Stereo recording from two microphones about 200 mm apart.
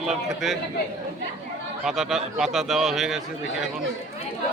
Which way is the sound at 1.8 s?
Centre (ahead or behind).